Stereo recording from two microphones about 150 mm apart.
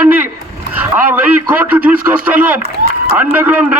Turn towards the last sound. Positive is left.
turn(degrees=-10)  # may be behind; listen again after turning